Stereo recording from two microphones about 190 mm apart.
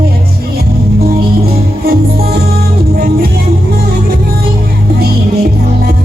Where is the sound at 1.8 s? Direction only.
55° right (ahead or behind).